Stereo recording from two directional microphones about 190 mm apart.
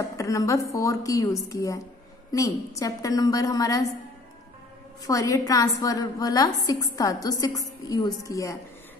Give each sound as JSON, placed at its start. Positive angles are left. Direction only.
{"t": 0.2, "sound": "a woman's voice", "side_deg": 15}
{"t": 5.0, "sound": "a woman's voice", "side_deg": 15}